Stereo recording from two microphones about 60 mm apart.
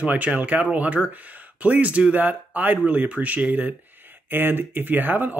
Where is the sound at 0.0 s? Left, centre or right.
Right.